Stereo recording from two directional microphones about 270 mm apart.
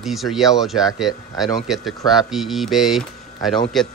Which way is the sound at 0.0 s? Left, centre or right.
Centre.